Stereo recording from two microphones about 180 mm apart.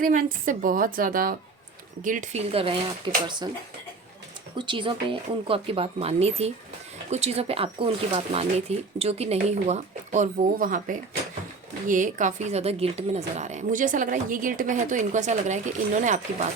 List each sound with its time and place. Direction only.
0.0 s speech: 50° right (ahead or behind)
2.5 s speech: 30° right (ahead or behind)
4.5 s speech: 25° right (ahead or behind); by 16.5 s 40° right (ahead or behind)